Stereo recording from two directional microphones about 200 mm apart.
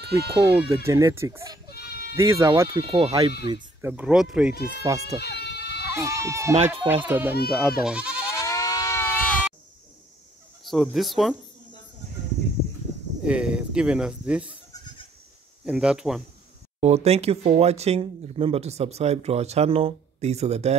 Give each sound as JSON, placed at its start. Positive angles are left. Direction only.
{"t": 0.0, "sound": "speech", "side_deg": -55}
{"t": 0.8, "sound": "speech", "side_deg": -15}
{"t": 1.7, "sound": "bleat", "side_deg": 50}
{"t": 2.1, "sound": "speech", "side_deg": -15}
{"t": 3.8, "sound": "speech", "side_deg": -5}
{"t": 4.8, "sound": "speech", "side_deg": -15}
{"t": 5.2, "sound": "goat", "side_deg": 55}
{"t": 5.9, "sound": "speech", "side_deg": -15}
{"t": 8.3, "sound": "sheep", "side_deg": 15}
{"t": 10.6, "sound": "speech", "side_deg": 0}
{"t": 13.2, "sound": "speech", "side_deg": -5}
{"t": 15.6, "sound": "speech", "side_deg": -5}
{"t": 16.8, "sound": "speech", "side_deg": -30}